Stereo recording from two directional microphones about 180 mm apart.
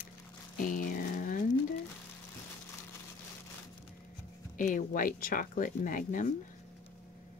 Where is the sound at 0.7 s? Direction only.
50° left (ahead or behind).